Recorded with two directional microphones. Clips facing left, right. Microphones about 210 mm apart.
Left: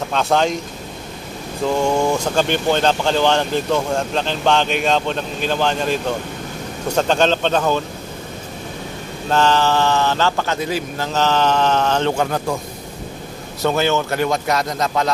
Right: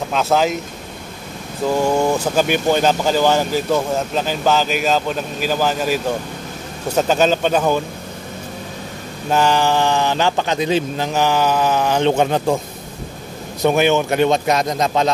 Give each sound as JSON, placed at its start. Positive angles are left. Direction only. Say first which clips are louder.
{"t": 0.1, "sound": "speech", "louder": "right 1 dB", "side_deg": -5}
{"t": 1.8, "sound": "speech", "louder": "right 1 dB", "side_deg": -5}
{"t": 7.0, "sound": "speech", "louder": "right 1 dB", "side_deg": -5}
{"t": 9.3, "sound": "speech", "louder": "even", "side_deg": -10}
{"t": 13.6, "sound": "a man's voice", "louder": "right 3 dB", "side_deg": -15}